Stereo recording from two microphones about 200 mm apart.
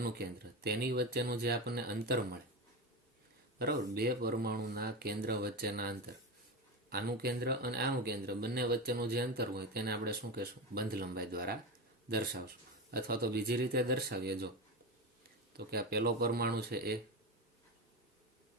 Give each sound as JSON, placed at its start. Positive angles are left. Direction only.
{"t": 0.0, "sound": "a man's voice", "side_deg": -55}
{"t": 3.6, "sound": "a man's voice", "side_deg": -50}
{"t": 15.5, "sound": "a man's voice", "side_deg": -50}